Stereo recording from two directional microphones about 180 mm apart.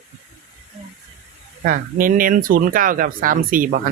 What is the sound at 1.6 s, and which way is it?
Speech, 50° right (ahead or behind).